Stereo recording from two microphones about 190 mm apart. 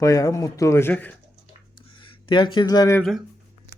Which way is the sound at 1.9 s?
25° left (ahead or behind).